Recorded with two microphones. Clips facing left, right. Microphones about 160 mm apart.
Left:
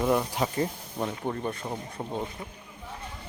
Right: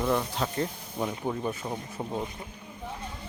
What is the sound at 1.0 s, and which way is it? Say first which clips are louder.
Speech: even; centre (ahead or behind).